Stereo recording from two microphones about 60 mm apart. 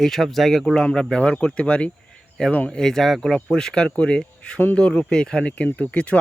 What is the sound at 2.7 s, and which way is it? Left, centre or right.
Speech, centre.